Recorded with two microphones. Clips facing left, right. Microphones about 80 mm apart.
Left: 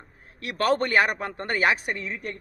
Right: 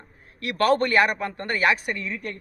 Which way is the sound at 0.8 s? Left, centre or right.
Left.